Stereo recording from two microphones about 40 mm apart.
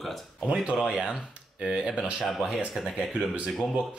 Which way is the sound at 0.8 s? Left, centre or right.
Centre.